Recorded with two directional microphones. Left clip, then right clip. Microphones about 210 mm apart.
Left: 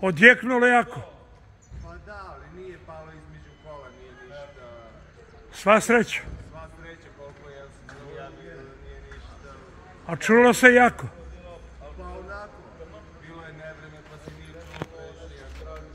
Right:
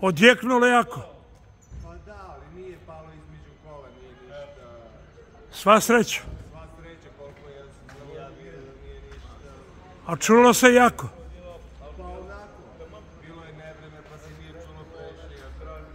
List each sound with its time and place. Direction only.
0.0 s a man's voice: 25° right (ahead or behind)
1.9 s basketball bounce: 5° left (ahead or behind)
5.5 s a man's voice: 20° right (ahead or behind)
10.0 s a man's voice: 25° right (ahead or behind)
12.0 s a sound: 5° left (ahead or behind)